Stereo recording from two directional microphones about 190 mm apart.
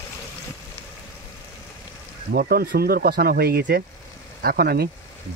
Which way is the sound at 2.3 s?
55° right (ahead or behind).